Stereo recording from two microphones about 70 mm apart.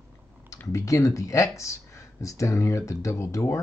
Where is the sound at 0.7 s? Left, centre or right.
Left.